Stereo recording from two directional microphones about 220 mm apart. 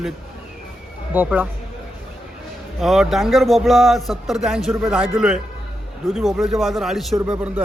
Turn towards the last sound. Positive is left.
turn(degrees=-5)  # may be behind; listen again after turning